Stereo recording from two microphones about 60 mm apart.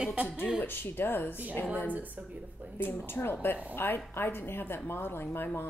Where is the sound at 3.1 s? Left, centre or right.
Left.